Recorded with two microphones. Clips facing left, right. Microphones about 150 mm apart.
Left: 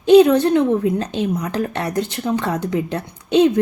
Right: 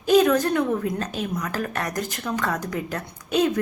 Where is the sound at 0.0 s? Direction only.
25° left (ahead or behind).